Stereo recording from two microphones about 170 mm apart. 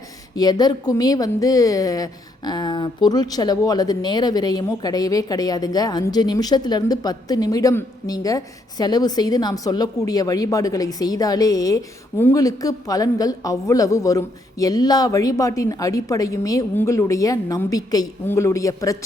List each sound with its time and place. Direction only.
0.3 s speech: 25° left (ahead or behind)